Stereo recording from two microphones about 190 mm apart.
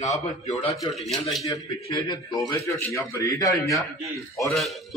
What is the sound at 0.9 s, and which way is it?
Speech, centre (ahead or behind).